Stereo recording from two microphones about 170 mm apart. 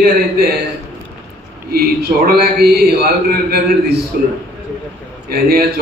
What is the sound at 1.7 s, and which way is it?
A man's voice, 65° right (ahead or behind).